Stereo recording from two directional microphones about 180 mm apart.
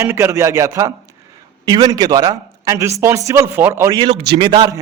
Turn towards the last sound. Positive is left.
turn(degrees=-25)  # may be behind; listen again after turning